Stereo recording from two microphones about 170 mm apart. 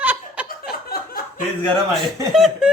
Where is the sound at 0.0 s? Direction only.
10° right (ahead or behind).